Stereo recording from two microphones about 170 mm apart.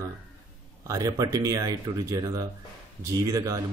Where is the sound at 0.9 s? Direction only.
20° right (ahead or behind).